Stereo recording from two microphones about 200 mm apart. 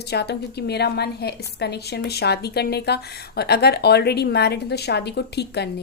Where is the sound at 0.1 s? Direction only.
55° left (ahead or behind).